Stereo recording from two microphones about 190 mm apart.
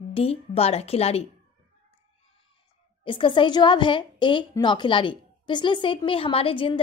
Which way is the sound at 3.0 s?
25° left (ahead or behind).